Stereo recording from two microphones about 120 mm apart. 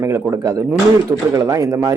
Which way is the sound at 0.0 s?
20° right (ahead or behind).